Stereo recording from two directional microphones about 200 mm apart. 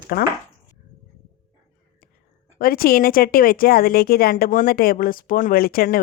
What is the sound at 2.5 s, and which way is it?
Speech, 45° left (ahead or behind).